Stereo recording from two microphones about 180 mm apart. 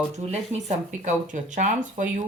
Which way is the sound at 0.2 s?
40° right (ahead or behind).